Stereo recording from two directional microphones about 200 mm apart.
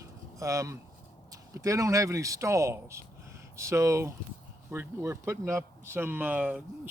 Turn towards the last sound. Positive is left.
turn(degrees=-5)  # may be behind; listen again after turning